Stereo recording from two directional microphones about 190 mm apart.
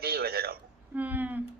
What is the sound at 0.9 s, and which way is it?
Speech, 10° right (ahead or behind).